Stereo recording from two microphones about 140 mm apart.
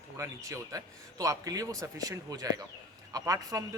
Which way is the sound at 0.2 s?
25° right (ahead or behind).